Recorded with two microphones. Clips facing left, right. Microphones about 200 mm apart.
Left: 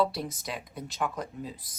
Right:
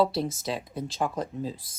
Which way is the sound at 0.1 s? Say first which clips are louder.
Right 6 dB; 25° right (ahead or behind).